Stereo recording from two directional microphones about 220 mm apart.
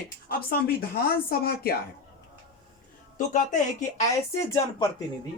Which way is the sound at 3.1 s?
35° left (ahead or behind).